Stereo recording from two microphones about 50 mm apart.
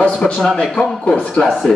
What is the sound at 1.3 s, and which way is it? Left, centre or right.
Speech, centre.